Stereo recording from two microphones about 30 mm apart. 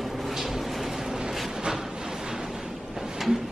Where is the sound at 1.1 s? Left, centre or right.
Right.